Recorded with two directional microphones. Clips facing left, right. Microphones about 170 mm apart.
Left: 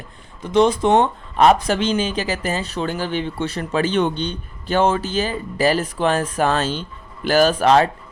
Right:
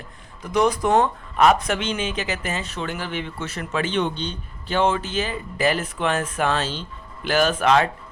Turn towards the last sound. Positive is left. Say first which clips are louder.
# left 4 dB
turn(degrees=35)  # may be behind; listen again after turning